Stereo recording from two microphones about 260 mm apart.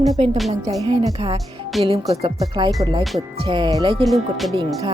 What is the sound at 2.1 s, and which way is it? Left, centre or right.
Speech, right.